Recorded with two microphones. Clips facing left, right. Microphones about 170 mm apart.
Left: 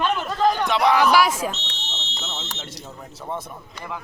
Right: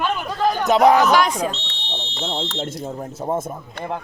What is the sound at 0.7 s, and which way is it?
Speech, 45° right (ahead or behind).